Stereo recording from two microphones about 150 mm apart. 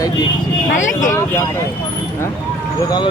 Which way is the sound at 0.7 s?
60° left (ahead or behind).